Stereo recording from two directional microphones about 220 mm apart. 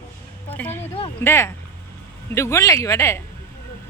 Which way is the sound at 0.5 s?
10° left (ahead or behind).